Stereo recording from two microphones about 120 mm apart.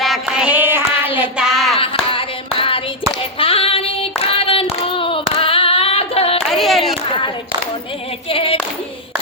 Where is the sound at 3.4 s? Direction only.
50° left (ahead or behind).